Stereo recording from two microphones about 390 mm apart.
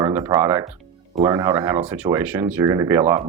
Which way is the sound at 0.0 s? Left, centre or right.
Centre.